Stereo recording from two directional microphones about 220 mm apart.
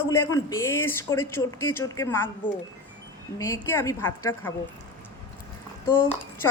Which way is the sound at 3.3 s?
15° left (ahead or behind).